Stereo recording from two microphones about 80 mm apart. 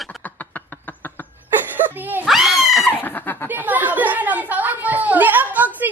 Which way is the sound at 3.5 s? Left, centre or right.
Right.